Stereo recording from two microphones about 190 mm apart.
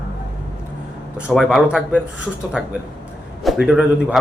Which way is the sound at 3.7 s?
5° right (ahead or behind).